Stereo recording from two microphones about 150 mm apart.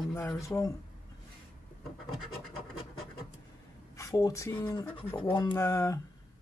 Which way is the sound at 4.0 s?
25° left (ahead or behind).